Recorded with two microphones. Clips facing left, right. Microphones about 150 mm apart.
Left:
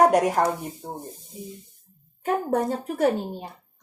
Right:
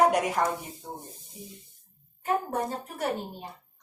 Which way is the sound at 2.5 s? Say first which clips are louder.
Left 7 dB; 65° left (ahead or behind).